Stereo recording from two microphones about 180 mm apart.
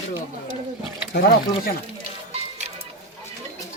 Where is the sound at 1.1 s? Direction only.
60° left (ahead or behind).